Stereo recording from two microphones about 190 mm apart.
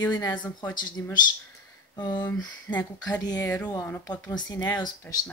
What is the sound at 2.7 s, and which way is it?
Speech, 10° left (ahead or behind).